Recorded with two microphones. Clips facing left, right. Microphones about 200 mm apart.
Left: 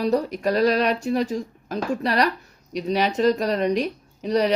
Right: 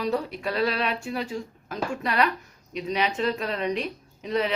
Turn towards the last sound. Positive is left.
turn(degrees=40)  # may be behind; listen again after turning